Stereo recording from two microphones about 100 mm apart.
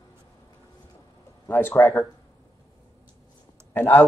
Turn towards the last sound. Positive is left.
turn(degrees=20)  # may be behind; listen again after turning